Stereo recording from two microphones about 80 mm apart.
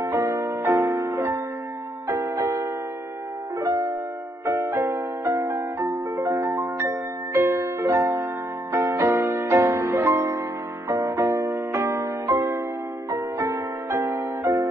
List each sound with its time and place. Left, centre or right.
0.2 s music: right
0.5 s music: right
0.7 s music: right
2.1 s music: right
3.5 s music: right
4.5 s music: right
6.8 s music: right
10.9 s music: right
11.7 s music: right
13.9 s music: right